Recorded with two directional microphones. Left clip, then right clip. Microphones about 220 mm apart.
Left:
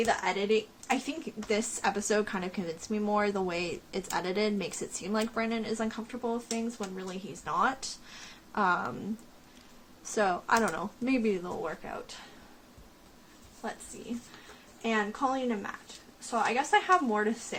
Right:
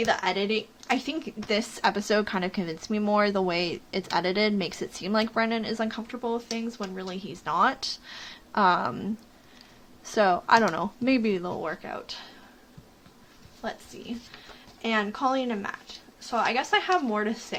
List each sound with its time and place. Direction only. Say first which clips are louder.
0.0 s speech: right 3 dB; 30° right (ahead or behind)
10.0 s speech: right 6 dB; 25° right (ahead or behind)
14.8 s a woman's voice: right 3 dB; 35° right (ahead or behind)